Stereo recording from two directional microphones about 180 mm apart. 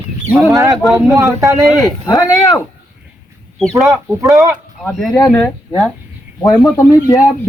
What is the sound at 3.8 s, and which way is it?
Speech, 15° right (ahead or behind).